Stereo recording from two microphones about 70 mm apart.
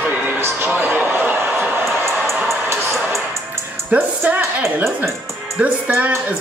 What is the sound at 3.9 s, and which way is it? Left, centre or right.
Speech, right.